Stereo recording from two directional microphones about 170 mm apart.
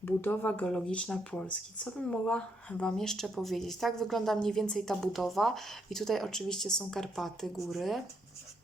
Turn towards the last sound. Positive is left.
turn(degrees=0)  # may be behind; listen again after turning